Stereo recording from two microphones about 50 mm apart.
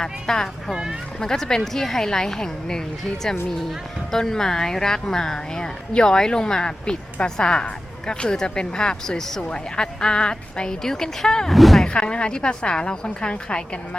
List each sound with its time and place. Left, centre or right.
0.0 s speech: centre
0.7 s speech: centre
1.2 s speech: centre
4.1 s speech: centre
11.9 s speech: left